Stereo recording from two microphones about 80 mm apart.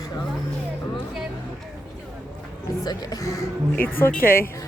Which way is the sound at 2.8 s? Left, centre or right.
Left.